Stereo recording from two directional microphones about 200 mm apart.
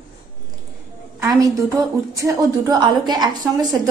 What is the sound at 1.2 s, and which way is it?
A woman's voice, 15° right (ahead or behind).